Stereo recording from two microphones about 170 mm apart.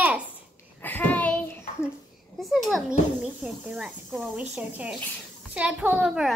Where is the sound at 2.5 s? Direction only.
Centre (ahead or behind).